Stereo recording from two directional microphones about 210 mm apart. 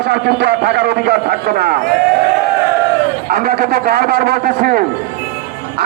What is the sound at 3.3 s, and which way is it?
A man's voice, 45° right (ahead or behind).